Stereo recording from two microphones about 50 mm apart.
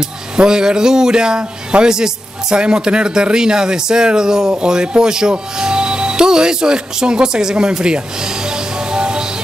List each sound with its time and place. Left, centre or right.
0.4 s a man's voice: centre